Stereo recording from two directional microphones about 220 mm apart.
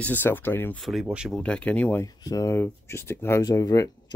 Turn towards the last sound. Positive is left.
turn(degrees=15)  # may be behind; listen again after turning